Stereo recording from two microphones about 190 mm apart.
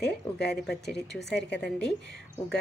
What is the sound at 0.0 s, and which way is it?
A woman's voice, 60° left (ahead or behind).